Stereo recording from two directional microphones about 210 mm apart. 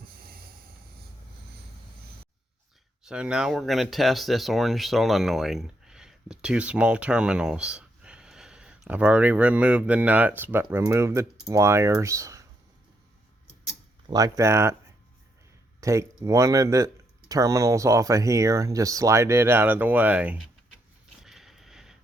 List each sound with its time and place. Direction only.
0.0 s train: 45° right (ahead or behind)
3.0 s speech: 5° right (ahead or behind)
14.1 s speech: 15° right (ahead or behind)
15.8 s speech: 15° right (ahead or behind)
21.2 s a sound: centre (ahead or behind)